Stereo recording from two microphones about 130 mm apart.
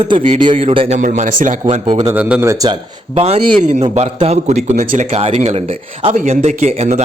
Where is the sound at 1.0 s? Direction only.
75° right (ahead or behind).